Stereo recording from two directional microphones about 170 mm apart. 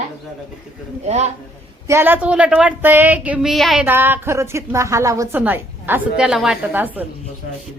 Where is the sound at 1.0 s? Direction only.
40° right (ahead or behind).